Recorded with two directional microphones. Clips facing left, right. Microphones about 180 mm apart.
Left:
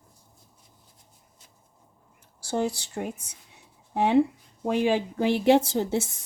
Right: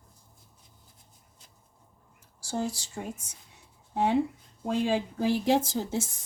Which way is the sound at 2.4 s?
65° left (ahead or behind).